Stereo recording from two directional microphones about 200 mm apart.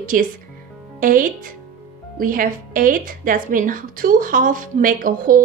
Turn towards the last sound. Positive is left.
turn(degrees=-45)  # may be behind; listen again after turning